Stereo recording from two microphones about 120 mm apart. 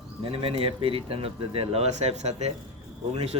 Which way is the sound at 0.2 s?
50° right (ahead or behind).